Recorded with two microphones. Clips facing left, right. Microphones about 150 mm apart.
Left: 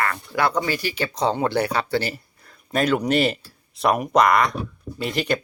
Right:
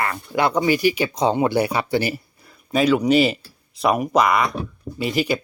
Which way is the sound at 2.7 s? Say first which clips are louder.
Right 4 dB; centre (ahead or behind).